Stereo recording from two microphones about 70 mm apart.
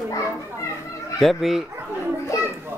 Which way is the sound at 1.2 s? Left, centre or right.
Centre.